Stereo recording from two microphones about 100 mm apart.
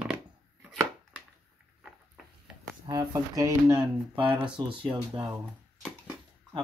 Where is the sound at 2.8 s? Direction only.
35° right (ahead or behind).